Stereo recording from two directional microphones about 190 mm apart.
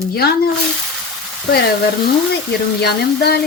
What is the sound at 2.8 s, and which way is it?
Speech, 60° left (ahead or behind).